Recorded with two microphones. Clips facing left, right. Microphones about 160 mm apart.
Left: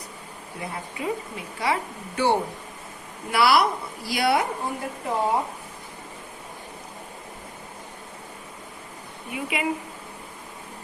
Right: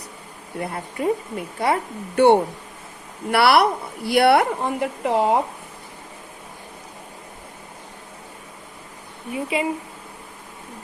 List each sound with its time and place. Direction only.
0.6 s a woman's voice: 50° right (ahead or behind); by 5.4 s 75° right (ahead or behind)
9.3 s speech: 30° right (ahead or behind)